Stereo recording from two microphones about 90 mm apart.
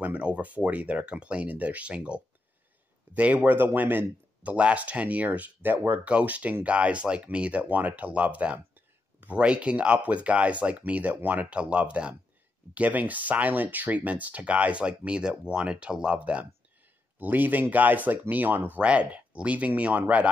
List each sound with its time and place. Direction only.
0.0 s speech: 15° right (ahead or behind)